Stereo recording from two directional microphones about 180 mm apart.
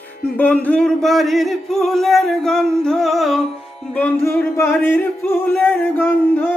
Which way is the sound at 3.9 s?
10° left (ahead or behind).